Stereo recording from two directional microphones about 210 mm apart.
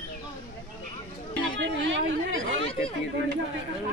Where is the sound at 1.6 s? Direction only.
65° right (ahead or behind).